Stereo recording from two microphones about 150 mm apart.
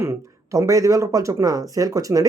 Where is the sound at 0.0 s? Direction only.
20° right (ahead or behind).